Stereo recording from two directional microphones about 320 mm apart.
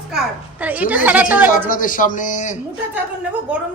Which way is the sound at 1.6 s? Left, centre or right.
Left.